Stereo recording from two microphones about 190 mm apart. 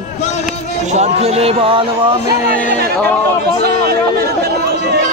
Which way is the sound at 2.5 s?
60° right (ahead or behind).